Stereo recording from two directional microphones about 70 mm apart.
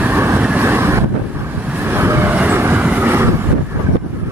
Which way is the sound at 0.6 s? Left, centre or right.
Right.